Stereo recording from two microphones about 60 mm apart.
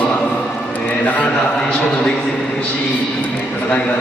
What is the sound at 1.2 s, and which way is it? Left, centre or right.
Speech, centre.